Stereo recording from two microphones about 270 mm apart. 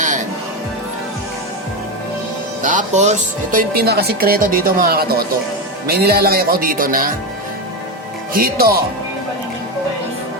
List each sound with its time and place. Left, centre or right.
2.6 s speech: right
8.3 s speech: right